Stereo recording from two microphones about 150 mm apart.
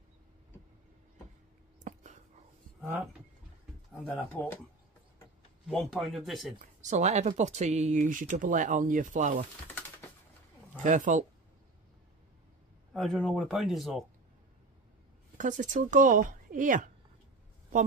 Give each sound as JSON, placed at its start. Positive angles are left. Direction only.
{"t": 1.9, "sound": "whispering", "side_deg": -55}
{"t": 2.8, "sound": "speech", "side_deg": -10}
{"t": 3.9, "sound": "pigeon", "side_deg": 5}
{"t": 4.3, "sound": "speech", "side_deg": 10}
{"t": 5.7, "sound": "speech", "side_deg": 0}
{"t": 6.6, "sound": "speech", "side_deg": -55}
{"t": 10.8, "sound": "speech", "side_deg": -55}
{"t": 12.9, "sound": "speech", "side_deg": 0}
{"t": 15.3, "sound": "speech", "side_deg": -55}